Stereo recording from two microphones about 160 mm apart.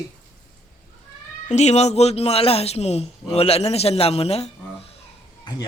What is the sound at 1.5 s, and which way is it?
Speech, 45° left (ahead or behind).